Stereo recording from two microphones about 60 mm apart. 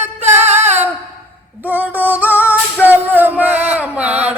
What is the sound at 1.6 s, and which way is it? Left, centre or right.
Female singing, right.